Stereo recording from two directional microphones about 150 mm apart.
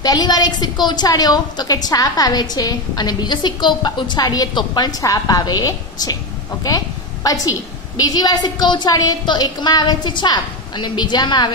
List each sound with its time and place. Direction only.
0.0 s a woman's voice: 25° left (ahead or behind)
8.0 s a woman's voice: 25° left (ahead or behind)